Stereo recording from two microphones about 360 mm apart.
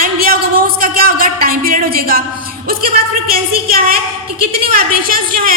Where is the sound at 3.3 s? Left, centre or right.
Right.